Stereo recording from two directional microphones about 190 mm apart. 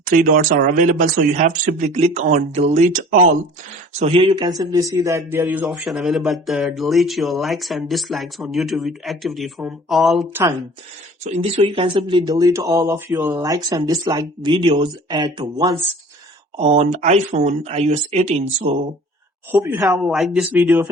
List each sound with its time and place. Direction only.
0.0 s speech: 45° right (ahead or behind)
4.0 s speech: 30° right (ahead or behind); by 10.2 s centre (ahead or behind)
11.2 s speech: 35° right (ahead or behind)
16.6 s speech: 35° right (ahead or behind)
19.5 s speech: 10° right (ahead or behind)
20.1 s speech: centre (ahead or behind)